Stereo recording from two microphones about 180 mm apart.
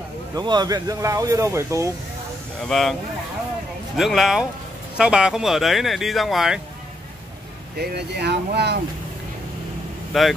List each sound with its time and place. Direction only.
0.4 s speech: 25° right (ahead or behind)
2.7 s speech: centre (ahead or behind)
7.7 s speech: 65° right (ahead or behind)
10.1 s speech: centre (ahead or behind)